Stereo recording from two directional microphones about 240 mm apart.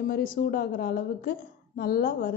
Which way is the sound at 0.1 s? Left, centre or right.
Left.